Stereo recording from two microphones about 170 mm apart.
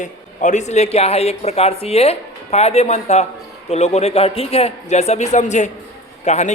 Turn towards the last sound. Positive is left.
turn(degrees=40)  # may be behind; listen again after turning